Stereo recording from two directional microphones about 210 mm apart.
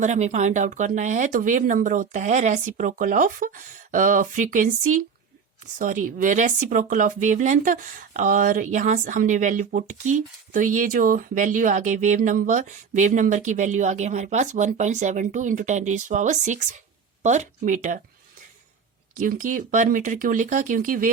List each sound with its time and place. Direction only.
0.0 s speech: 35° right (ahead or behind)
19.1 s speech: 40° right (ahead or behind)